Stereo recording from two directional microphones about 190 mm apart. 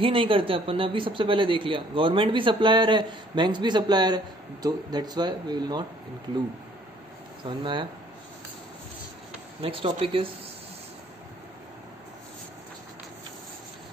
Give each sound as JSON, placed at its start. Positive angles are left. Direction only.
{"t": 0.0, "sound": "speech", "side_deg": -25}
{"t": 7.4, "sound": "speech", "side_deg": -25}
{"t": 9.6, "sound": "speech", "side_deg": -30}